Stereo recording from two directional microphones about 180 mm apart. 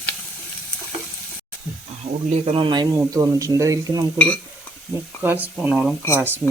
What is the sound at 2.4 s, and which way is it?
Speech, 30° right (ahead or behind).